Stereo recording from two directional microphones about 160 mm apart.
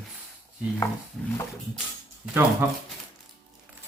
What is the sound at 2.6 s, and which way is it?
Speech, 15° right (ahead or behind).